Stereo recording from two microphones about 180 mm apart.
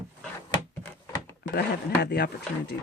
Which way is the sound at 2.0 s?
65° left (ahead or behind).